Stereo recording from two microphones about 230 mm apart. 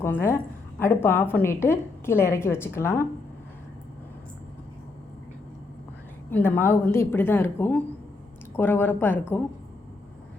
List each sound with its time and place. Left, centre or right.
0.0 s a woman's voice: centre
6.3 s a woman's voice: centre